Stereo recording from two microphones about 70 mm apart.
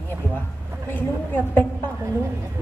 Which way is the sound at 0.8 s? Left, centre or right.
Left.